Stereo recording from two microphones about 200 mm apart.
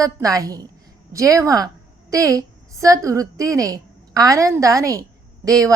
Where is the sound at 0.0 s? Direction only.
15° right (ahead or behind).